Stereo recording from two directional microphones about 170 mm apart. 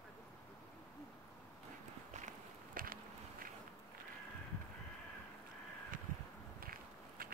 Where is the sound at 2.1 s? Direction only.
50° right (ahead or behind).